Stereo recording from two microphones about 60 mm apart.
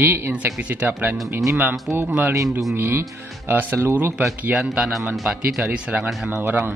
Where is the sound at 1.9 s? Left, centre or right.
Centre.